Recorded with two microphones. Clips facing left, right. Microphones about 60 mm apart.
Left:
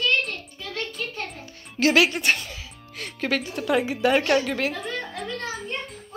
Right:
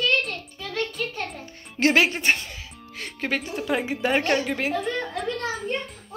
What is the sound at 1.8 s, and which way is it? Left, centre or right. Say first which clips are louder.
A woman's voice: left 1 dB; right.